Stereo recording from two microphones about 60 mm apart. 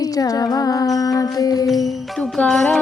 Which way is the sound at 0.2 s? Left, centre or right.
Left.